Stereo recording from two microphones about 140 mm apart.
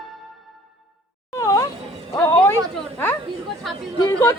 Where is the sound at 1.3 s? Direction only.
25° left (ahead or behind).